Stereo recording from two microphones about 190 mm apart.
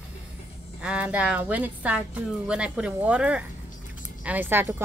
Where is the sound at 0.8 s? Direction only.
5° right (ahead or behind).